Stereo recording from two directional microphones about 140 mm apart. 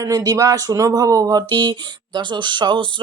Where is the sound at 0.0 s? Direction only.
25° right (ahead or behind).